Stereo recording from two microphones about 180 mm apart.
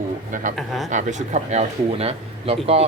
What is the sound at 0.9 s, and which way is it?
Speech, 45° right (ahead or behind).